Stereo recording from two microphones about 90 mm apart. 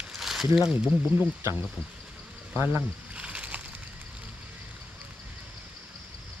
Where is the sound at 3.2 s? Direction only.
15° right (ahead or behind).